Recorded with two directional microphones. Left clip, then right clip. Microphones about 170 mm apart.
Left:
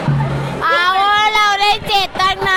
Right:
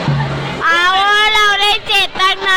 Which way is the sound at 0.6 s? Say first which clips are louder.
Right 2 dB; 15° left (ahead or behind).